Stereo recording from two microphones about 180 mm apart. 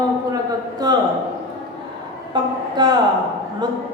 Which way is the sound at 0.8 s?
20° right (ahead or behind).